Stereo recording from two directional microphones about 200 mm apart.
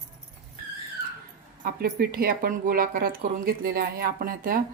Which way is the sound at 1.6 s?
50° right (ahead or behind).